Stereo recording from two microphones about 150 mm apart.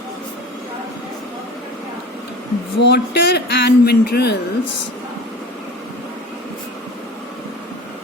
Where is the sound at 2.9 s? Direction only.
90° left.